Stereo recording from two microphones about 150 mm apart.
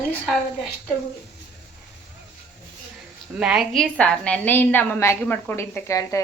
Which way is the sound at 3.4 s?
5° right (ahead or behind).